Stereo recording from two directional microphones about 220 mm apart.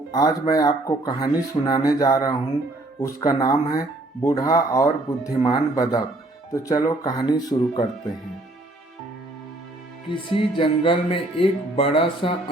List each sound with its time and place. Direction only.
0.1 s speech: 15° left (ahead or behind)
10.1 s music: 25° left (ahead or behind)